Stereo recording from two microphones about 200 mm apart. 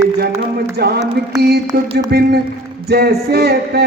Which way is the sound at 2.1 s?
50° right (ahead or behind).